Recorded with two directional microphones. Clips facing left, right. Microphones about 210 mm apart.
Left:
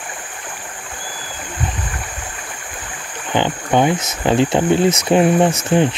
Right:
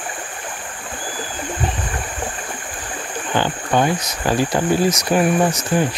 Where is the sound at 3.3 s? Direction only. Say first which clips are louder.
Left 2 dB; 20° left (ahead or behind).